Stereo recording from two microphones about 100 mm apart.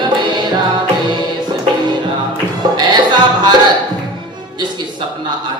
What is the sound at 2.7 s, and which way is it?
Music, 45° right (ahead or behind).